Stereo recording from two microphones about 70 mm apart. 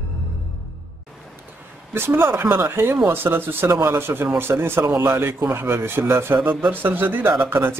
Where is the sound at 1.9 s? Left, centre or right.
Right.